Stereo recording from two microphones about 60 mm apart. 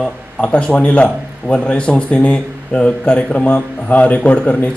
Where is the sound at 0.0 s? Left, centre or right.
Centre.